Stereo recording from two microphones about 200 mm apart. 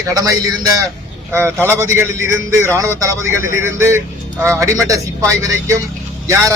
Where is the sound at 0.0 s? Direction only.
15° right (ahead or behind).